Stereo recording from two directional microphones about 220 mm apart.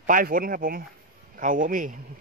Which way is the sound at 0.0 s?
40° right (ahead or behind).